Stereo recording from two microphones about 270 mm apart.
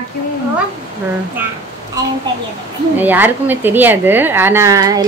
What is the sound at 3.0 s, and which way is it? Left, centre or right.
A woman's voice, centre.